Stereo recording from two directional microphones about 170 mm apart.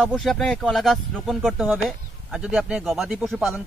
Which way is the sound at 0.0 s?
5° left (ahead or behind).